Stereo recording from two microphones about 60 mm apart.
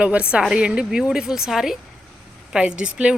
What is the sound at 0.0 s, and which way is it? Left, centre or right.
A woman's voice, right.